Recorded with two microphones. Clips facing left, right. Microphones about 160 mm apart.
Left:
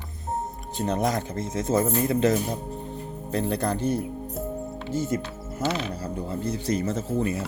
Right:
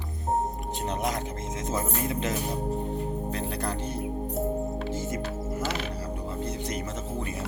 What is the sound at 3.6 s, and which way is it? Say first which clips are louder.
Speech: left 6 dB; 30° right (ahead or behind).